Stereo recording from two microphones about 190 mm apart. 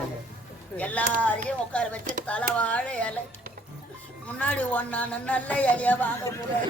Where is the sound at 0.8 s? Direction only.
5° left (ahead or behind).